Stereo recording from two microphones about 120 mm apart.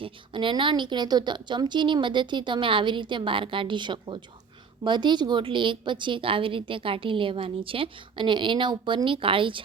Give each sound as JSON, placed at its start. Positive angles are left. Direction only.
{"t": 0.0, "sound": "a woman's voice", "side_deg": -45}